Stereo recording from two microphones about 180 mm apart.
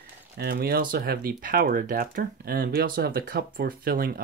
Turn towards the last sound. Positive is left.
turn(degrees=-55)  # may be behind; listen again after turning